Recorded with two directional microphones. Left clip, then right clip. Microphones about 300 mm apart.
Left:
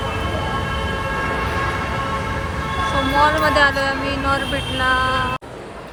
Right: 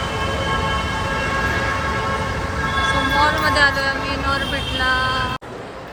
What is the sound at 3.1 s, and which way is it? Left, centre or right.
A woman's voice, centre.